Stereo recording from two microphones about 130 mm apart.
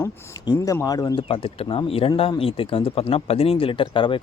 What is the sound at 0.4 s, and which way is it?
Speech, 25° left (ahead or behind).